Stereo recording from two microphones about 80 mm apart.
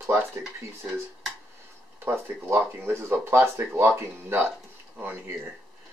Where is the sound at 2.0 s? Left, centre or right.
Right.